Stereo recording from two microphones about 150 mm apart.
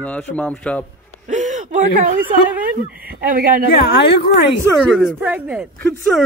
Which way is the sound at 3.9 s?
90° left.